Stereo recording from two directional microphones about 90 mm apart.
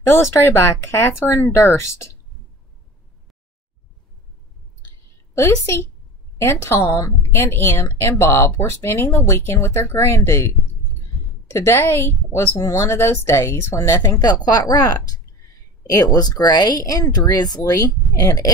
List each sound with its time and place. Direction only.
0.0 s a woman's voice: 30° left (ahead or behind)
5.3 s a woman's voice: 35° left (ahead or behind)
11.5 s a woman's voice: 30° left (ahead or behind)
14.2 s a woman's voice: 45° left (ahead or behind)